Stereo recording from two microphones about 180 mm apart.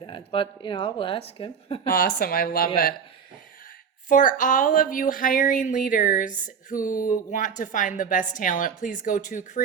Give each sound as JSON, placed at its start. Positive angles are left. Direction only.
{"t": 0.0, "sound": "speech", "side_deg": 30}
{"t": 1.9, "sound": "speech", "side_deg": 55}
{"t": 4.1, "sound": "speech", "side_deg": 45}